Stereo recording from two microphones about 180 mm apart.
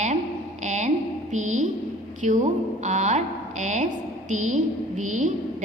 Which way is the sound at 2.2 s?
45° right (ahead or behind).